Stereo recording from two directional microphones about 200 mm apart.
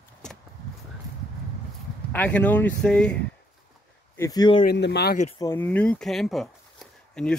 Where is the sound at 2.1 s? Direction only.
10° left (ahead or behind).